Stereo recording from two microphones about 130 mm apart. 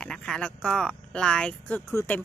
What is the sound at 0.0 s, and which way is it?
Speech, 5° left (ahead or behind).